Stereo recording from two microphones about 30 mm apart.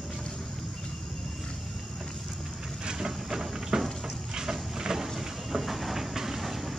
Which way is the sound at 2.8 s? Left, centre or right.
Right.